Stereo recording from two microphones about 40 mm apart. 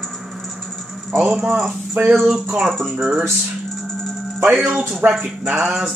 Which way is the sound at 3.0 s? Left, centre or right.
Right.